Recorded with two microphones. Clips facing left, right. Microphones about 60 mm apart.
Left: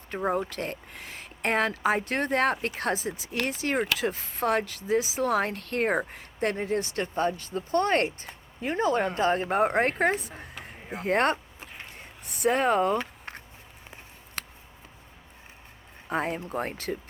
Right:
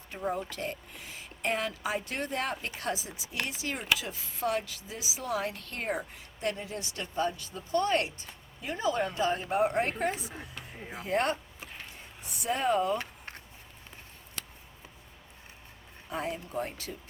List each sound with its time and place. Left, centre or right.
0.1 s speech: left
14.4 s a sound: left
16.0 s speech: left